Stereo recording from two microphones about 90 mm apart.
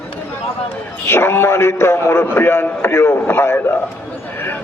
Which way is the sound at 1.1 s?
25° left (ahead or behind).